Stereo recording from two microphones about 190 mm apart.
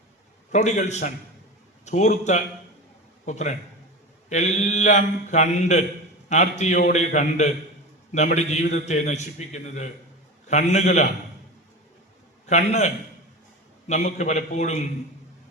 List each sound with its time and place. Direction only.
0.5 s speech: 40° left (ahead or behind)
12.5 s speech: 40° left (ahead or behind)